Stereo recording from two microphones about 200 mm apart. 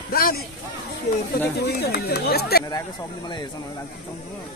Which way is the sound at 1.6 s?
50° left (ahead or behind).